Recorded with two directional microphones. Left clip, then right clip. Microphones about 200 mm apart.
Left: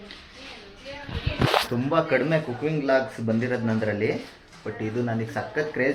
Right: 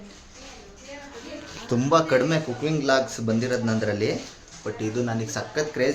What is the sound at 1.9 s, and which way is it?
Speech, 25° right (ahead or behind).